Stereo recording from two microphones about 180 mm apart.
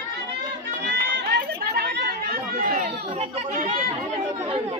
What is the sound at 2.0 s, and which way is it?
Chatter, 60° right (ahead or behind).